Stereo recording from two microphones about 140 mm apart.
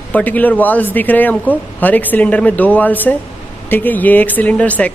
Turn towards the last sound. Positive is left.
turn(degrees=10)  # may be behind; listen again after turning